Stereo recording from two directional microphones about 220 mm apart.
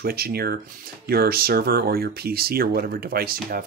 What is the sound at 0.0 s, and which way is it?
Speech, 45° right (ahead or behind).